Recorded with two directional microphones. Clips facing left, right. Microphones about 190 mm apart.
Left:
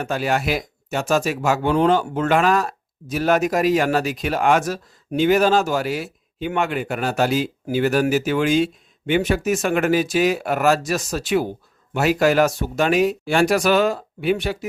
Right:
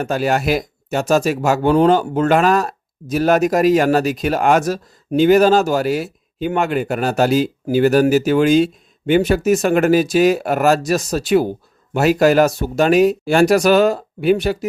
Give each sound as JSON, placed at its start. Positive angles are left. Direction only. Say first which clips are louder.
{"t": 0.0, "sound": "speech", "louder": "right 4 dB", "side_deg": -40}